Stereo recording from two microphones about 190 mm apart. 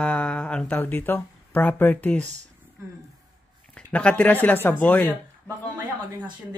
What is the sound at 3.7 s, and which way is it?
Speech, 5° left (ahead or behind).